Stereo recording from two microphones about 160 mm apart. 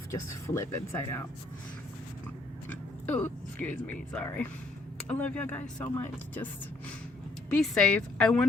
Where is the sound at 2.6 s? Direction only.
10° left (ahead or behind).